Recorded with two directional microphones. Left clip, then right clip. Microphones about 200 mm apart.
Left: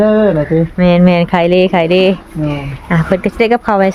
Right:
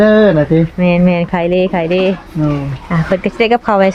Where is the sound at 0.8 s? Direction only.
15° left (ahead or behind).